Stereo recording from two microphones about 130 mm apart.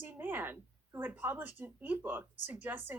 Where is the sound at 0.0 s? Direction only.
15° right (ahead or behind).